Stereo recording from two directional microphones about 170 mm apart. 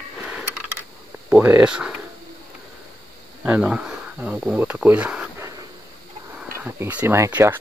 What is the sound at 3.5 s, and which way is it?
Speech, 5° right (ahead or behind).